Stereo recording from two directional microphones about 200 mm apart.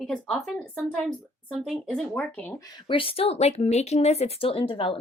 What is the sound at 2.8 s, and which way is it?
Speech, 25° left (ahead or behind).